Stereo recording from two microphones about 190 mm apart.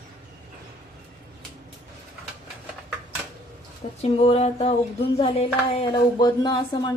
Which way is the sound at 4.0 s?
30° left (ahead or behind).